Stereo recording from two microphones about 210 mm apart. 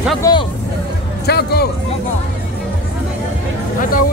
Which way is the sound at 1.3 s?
50° left (ahead or behind).